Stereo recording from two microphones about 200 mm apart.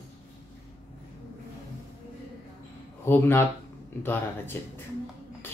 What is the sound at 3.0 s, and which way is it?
Speech, 10° left (ahead or behind).